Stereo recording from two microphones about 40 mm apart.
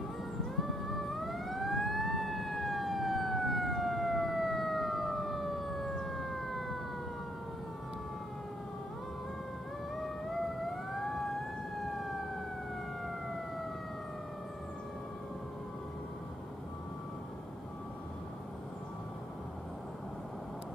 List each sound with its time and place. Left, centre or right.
0.6 s emergency vehicle: centre
9.9 s theremin: centre
11.8 s emergency vehicle: centre